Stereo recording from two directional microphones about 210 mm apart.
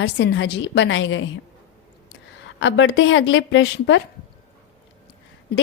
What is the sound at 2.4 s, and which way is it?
A woman's voice, 60° left (ahead or behind).